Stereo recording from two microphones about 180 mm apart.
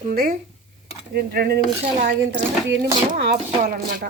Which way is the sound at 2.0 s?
75° right (ahead or behind).